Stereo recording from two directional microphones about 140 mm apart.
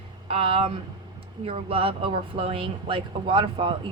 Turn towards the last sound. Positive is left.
turn(degrees=-40)  # may be behind; listen again after turning